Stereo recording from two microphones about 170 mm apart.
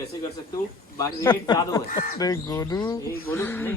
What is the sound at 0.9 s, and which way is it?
A man's voice, 25° left (ahead or behind).